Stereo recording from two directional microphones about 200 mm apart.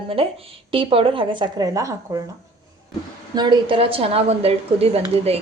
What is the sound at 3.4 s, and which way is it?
Speech, 20° right (ahead or behind).